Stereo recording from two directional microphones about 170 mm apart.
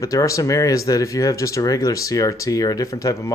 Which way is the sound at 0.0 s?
20° left (ahead or behind).